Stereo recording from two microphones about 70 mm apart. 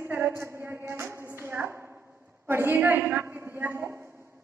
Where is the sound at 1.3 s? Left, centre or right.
Right.